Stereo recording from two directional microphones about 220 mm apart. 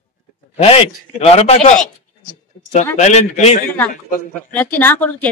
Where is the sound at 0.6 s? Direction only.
25° left (ahead or behind).